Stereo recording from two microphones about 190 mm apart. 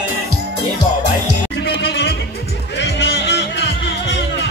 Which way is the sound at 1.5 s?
60° left (ahead or behind).